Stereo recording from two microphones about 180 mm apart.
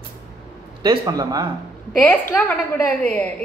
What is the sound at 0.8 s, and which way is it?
Speech, 25° right (ahead or behind).